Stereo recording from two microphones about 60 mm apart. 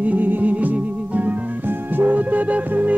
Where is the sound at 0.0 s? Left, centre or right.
Right.